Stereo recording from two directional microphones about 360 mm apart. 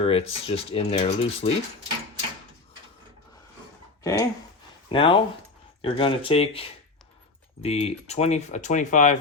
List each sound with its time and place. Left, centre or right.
0.0 s speech: centre
4.0 s speech: centre